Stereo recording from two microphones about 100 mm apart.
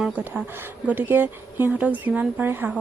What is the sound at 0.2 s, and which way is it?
Speech, 20° right (ahead or behind).